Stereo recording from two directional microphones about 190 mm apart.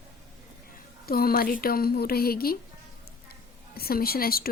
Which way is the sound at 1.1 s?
50° left (ahead or behind).